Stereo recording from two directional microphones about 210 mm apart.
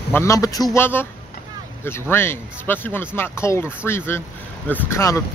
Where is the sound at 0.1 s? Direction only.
15° left (ahead or behind).